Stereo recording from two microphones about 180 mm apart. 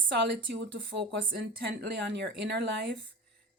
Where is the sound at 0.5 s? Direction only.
80° right.